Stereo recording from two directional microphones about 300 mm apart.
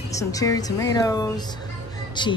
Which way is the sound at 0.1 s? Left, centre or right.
Centre.